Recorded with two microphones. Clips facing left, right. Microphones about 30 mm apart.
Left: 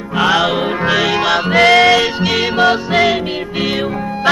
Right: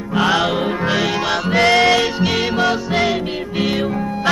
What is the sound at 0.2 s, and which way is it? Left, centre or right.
Music, centre.